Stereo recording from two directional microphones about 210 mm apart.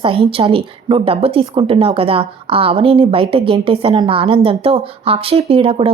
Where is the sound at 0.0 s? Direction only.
25° right (ahead or behind).